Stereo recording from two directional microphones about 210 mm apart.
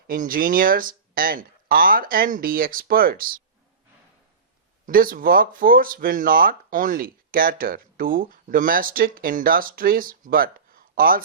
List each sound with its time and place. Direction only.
0.1 s speech: 40° right (ahead or behind)
4.9 s speech: 40° right (ahead or behind)